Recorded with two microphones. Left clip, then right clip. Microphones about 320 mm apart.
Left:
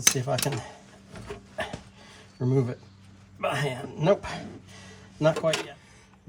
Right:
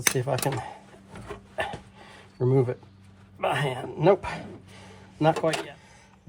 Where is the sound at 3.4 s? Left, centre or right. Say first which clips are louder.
Right 2 dB; right.